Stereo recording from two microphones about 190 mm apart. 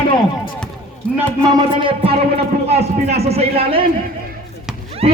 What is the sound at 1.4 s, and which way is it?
Music, 20° right (ahead or behind).